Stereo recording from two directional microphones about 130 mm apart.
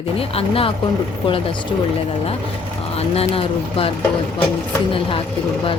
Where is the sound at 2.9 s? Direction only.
50° left (ahead or behind).